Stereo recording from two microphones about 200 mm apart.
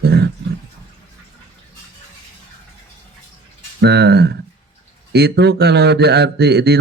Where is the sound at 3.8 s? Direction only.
55° right (ahead or behind).